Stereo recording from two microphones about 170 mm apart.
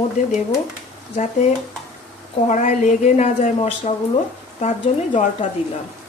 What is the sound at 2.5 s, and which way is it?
A woman's voice, 45° left (ahead or behind).